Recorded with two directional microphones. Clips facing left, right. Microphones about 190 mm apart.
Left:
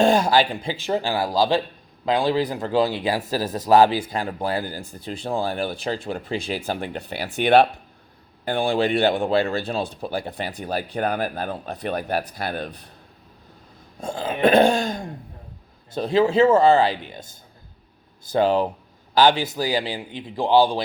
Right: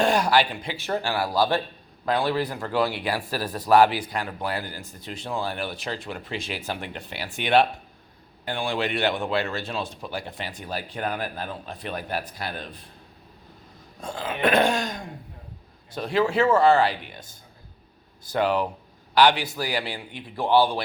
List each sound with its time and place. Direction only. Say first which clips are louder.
0.0 s speech: left 4 dB; 25° left (ahead or behind); by 12.2 s 40° left (ahead or behind)
12.2 s speech: left 5 dB; 55° left (ahead or behind)
14.0 s speech: left 5 dB; 25° left (ahead or behind)